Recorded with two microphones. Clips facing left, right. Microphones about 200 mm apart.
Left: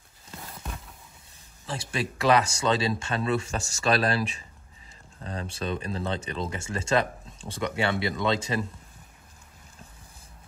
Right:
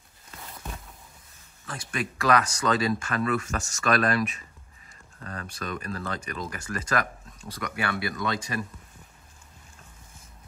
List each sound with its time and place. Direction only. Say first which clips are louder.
1.7 s speech: left 2 dB; 25° left (ahead or behind)